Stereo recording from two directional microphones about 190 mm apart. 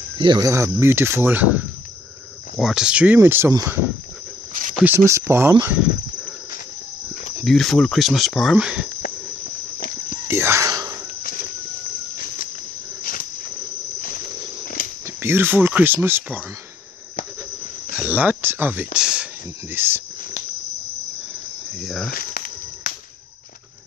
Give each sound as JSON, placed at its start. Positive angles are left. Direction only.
{"t": 0.2, "sound": "speech", "side_deg": -20}
{"t": 2.5, "sound": "speech", "side_deg": -5}
{"t": 4.8, "sound": "speech", "side_deg": -15}
{"t": 7.4, "sound": "speech", "side_deg": 0}
{"t": 10.2, "sound": "a sound", "side_deg": -15}
{"t": 13.0, "sound": "cricket", "side_deg": 50}
{"t": 15.0, "sound": "speech", "side_deg": -10}
{"t": 17.9, "sound": "speech", "side_deg": -10}
{"t": 21.8, "sound": "speech", "side_deg": 0}
{"t": 22.1, "sound": "a sound", "side_deg": 50}